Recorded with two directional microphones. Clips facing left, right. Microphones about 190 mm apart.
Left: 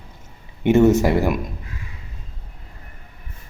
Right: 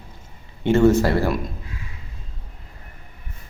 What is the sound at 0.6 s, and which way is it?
Speech, 20° left (ahead or behind).